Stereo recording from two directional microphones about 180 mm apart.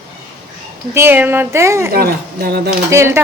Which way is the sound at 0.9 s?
10° right (ahead or behind).